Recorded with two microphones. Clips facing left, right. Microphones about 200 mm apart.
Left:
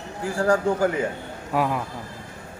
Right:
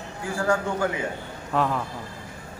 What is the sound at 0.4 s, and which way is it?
Speech, 35° left (ahead or behind).